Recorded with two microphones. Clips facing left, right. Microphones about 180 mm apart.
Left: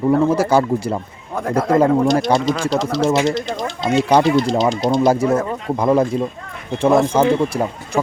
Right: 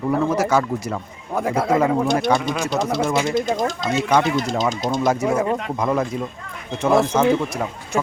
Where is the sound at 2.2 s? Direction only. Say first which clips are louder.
Left 3 dB; 30° left (ahead or behind).